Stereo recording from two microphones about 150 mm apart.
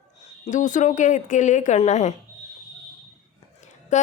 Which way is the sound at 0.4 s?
55° left (ahead or behind).